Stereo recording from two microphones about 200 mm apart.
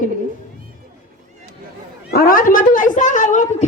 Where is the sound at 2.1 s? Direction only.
45° left (ahead or behind).